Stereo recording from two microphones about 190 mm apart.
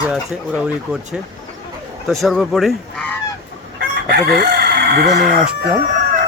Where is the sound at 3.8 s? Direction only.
55° right (ahead or behind).